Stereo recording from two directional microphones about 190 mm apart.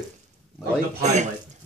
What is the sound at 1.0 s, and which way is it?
Speech, 35° right (ahead or behind).